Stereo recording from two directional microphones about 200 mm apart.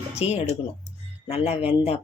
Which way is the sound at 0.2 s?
35° left (ahead or behind).